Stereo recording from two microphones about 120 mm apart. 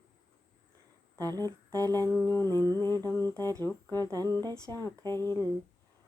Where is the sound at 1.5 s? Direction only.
30° right (ahead or behind).